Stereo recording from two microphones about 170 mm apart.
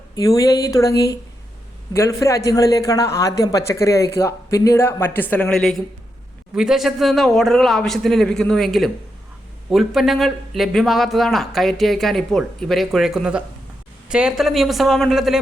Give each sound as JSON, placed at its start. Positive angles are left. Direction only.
{"t": 0.2, "sound": "a man's voice", "side_deg": 20}